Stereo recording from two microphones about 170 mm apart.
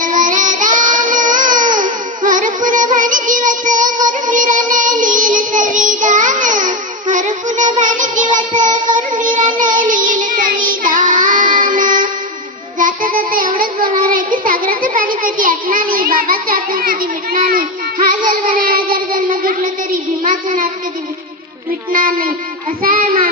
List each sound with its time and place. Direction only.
0.0 s child singing: 50° right (ahead or behind)
9.6 s music: 50° right (ahead or behind)
12.8 s child singing: 55° right (ahead or behind)
14.4 s a child's voice: 55° right (ahead or behind)
18.4 s child singing: 55° right (ahead or behind)
18.9 s a child's voice: 55° right (ahead or behind)
21.9 s child singing: 55° right (ahead or behind)